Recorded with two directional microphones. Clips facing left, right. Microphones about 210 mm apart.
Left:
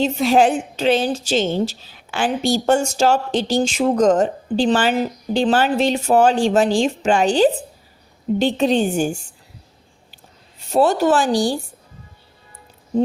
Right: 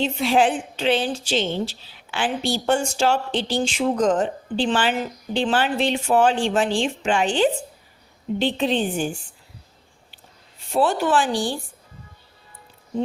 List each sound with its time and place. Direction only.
0.0 s a woman's voice: 40° left (ahead or behind)
10.7 s a woman's voice: 40° left (ahead or behind)